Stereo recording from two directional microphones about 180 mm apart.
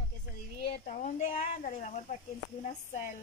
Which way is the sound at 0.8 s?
40° left (ahead or behind).